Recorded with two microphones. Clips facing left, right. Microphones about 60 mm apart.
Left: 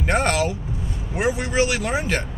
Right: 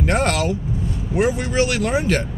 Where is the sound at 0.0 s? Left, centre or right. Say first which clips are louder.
Right 1 dB; centre.